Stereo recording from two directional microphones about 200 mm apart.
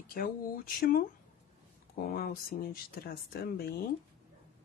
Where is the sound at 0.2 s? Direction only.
50° left (ahead or behind).